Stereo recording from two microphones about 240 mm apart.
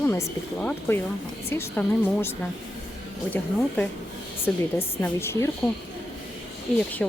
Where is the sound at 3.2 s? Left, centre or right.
Centre.